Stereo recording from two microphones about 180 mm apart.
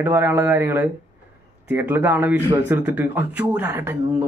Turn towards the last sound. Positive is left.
turn(degrees=-10)  # may be behind; listen again after turning